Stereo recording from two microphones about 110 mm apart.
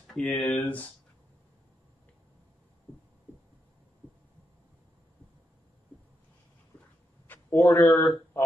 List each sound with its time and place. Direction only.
0.0 s a sound: 5° left (ahead or behind)
0.3 s speech: 15° left (ahead or behind)
7.2 s speech: 20° left (ahead or behind)